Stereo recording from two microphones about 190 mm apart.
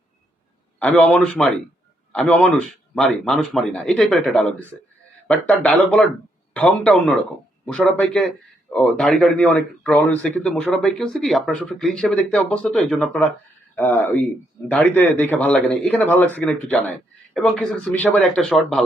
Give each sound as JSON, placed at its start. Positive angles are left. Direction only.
{"t": 0.8, "sound": "a man's voice", "side_deg": 5}